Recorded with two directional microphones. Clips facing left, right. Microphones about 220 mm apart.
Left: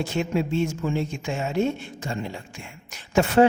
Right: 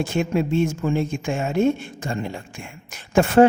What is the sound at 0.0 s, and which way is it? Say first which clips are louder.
A woman's voice: right 3 dB; 50° right (ahead or behind).